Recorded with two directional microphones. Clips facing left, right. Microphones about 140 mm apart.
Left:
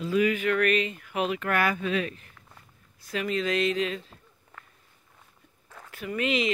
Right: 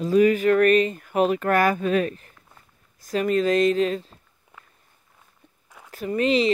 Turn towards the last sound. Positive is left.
turn(degrees=-35)  # may be behind; listen again after turning